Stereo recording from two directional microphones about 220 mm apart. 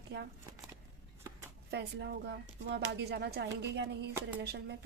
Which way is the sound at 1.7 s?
50° right (ahead or behind).